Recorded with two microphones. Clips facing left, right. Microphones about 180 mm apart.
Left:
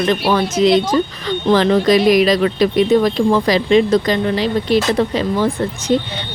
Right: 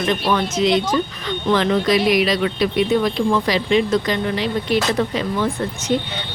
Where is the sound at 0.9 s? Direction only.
35° left (ahead or behind).